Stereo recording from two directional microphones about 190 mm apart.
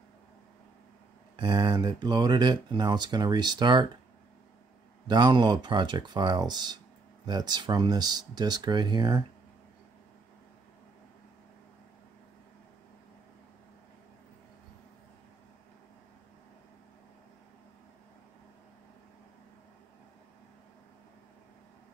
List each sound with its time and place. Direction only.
1.3 s speech: 25° right (ahead or behind)
5.0 s speech: 25° right (ahead or behind)